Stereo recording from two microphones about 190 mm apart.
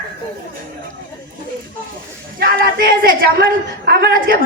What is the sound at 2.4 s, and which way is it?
A woman's voice, 50° right (ahead or behind).